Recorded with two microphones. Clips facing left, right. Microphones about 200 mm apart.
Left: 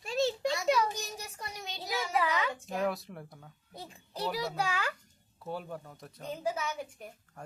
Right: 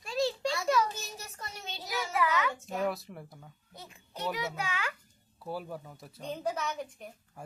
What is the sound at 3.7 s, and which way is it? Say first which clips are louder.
A child's voice: left 3 dB; 30° left (ahead or behind).